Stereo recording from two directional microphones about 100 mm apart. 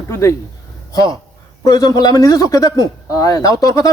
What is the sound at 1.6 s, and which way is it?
A man's voice, 35° left (ahead or behind).